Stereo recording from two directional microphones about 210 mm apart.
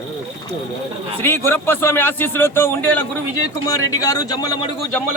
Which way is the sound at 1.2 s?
10° left (ahead or behind).